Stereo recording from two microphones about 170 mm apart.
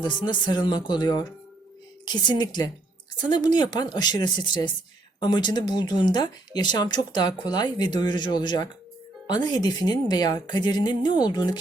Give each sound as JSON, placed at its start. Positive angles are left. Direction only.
{"t": 0.0, "sound": "speech", "side_deg": 25}